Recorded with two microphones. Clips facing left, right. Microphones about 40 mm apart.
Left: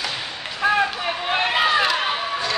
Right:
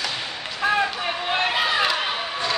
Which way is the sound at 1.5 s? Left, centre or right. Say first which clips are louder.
Left 6 dB; centre.